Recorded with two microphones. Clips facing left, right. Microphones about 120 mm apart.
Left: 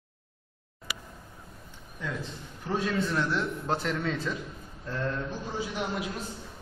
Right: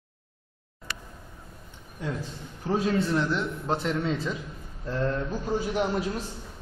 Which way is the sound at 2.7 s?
35° right (ahead or behind).